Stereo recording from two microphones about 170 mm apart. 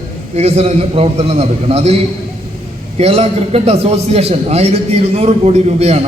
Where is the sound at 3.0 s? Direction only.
35° right (ahead or behind).